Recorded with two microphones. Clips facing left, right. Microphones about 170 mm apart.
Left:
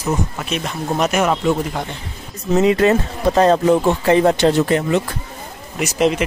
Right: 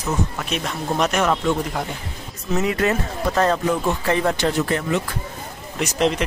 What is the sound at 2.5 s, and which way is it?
Speech, 25° left (ahead or behind).